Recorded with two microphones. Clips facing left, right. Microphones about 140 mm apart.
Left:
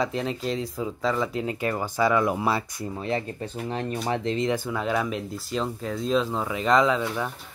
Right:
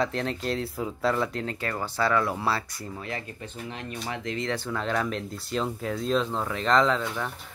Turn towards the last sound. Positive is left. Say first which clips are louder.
# left 2 dB
turn(degrees=5)  # may be behind; listen again after turning